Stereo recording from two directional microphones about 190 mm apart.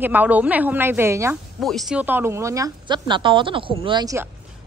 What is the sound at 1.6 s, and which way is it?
A woman's voice, centre (ahead or behind).